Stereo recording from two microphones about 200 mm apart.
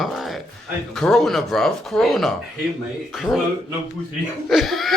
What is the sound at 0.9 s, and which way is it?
Speech, centre (ahead or behind).